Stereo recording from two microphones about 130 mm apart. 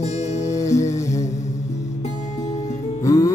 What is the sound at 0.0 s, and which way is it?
Music, 60° left (ahead or behind).